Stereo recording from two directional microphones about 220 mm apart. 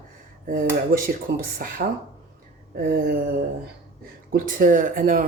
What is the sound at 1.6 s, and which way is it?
Speech, 40° right (ahead or behind).